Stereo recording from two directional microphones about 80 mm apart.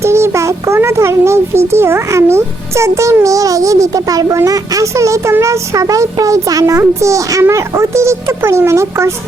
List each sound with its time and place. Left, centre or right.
0.0 s a child's voice: right